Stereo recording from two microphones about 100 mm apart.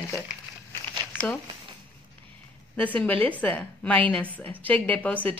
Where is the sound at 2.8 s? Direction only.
15° left (ahead or behind).